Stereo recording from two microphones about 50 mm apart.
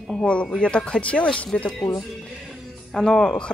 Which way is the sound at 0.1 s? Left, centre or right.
Centre.